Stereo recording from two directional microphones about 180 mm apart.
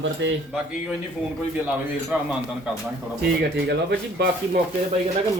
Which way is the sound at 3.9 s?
65° right (ahead or behind).